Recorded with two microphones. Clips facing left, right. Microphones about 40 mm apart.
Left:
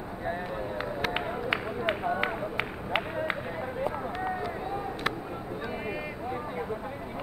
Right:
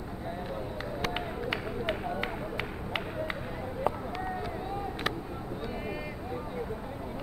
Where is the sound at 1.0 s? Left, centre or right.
Centre.